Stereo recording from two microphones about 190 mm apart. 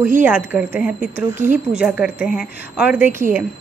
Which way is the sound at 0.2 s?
10° right (ahead or behind).